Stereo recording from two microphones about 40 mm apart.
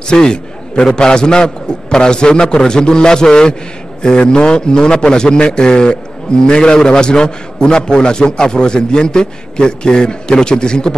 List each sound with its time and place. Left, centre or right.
0.1 s a man's voice: centre